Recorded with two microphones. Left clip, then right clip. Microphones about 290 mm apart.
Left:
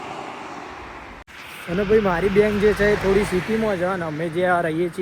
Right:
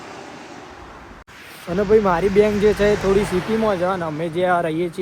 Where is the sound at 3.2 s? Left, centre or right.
Right.